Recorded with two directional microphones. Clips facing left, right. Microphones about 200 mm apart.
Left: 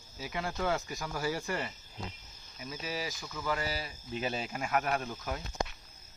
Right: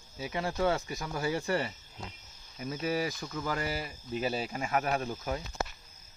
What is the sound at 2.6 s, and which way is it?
Cricket, 55° right (ahead or behind).